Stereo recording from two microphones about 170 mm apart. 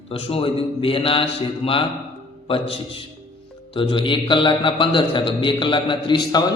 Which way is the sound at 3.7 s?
30° left (ahead or behind).